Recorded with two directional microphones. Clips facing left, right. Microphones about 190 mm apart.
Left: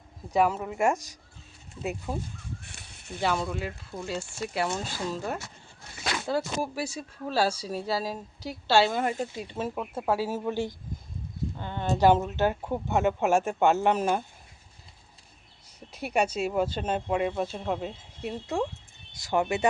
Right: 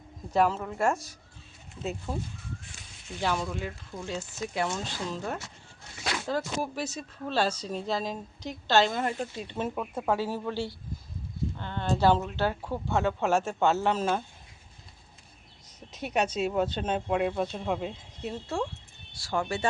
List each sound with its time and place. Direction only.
0.3 s speech: 10° left (ahead or behind)
3.3 s speech: 5° left (ahead or behind)
15.9 s speech: 10° left (ahead or behind)
19.1 s speech: 20° left (ahead or behind)